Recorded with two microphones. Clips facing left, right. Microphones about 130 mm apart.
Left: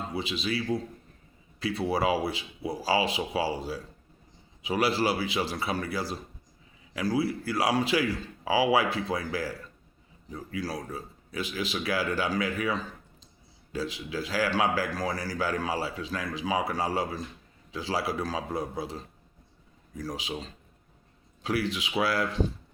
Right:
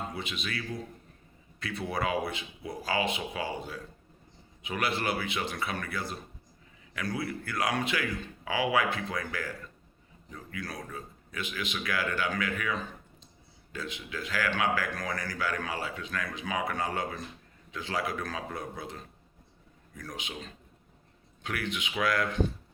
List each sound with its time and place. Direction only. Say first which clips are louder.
0.1 s a man's voice: left 6 dB; 30° left (ahead or behind)